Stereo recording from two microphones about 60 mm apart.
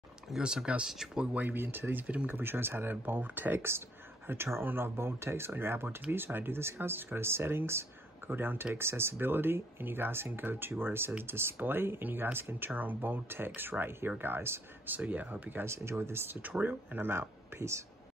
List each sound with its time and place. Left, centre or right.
0.3 s speech: centre
1.3 s speech: right
15.0 s speech: right
15.6 s speech: right
16.3 s speech: right